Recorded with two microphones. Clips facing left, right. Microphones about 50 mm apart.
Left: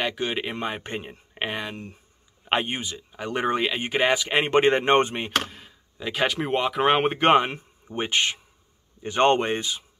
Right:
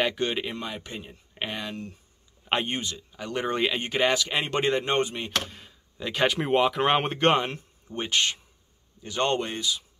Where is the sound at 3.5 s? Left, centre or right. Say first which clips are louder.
Left 1 dB; centre; by 5.2 s left.